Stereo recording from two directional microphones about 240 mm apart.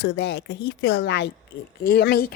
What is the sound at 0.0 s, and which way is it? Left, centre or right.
Speech, left.